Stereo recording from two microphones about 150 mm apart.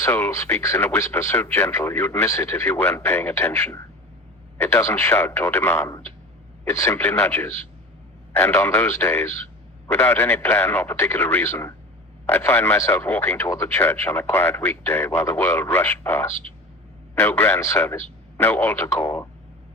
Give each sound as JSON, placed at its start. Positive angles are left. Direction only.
{"t": 0.0, "sound": "speech", "side_deg": 15}